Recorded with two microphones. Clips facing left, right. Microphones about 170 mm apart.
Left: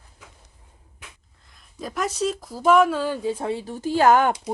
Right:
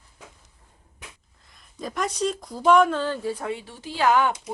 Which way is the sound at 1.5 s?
Centre (ahead or behind).